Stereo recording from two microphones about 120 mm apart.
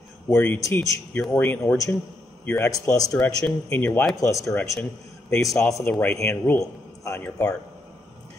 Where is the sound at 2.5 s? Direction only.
25° left (ahead or behind).